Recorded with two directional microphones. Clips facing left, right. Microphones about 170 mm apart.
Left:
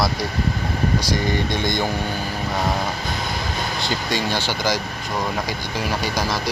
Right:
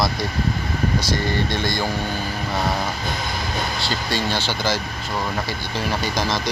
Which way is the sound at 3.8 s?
15° left (ahead or behind).